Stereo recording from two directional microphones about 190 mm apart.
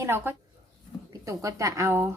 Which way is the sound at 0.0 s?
15° right (ahead or behind).